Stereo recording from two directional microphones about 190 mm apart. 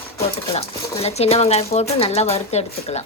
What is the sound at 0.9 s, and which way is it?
Speech, 35° left (ahead or behind).